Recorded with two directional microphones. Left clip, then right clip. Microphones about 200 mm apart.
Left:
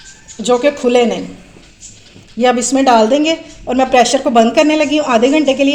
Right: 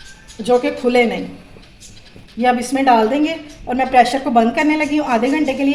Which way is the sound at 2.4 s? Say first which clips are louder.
Left 4 dB; 45° left (ahead or behind).